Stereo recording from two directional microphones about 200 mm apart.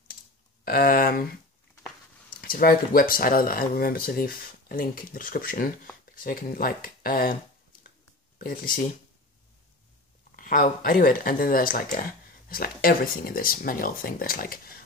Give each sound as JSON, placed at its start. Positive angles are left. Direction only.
{"t": 0.7, "sound": "speech", "side_deg": 45}
{"t": 2.4, "sound": "speech", "side_deg": 45}
{"t": 8.4, "sound": "speech", "side_deg": 45}
{"t": 10.3, "sound": "speech", "side_deg": 45}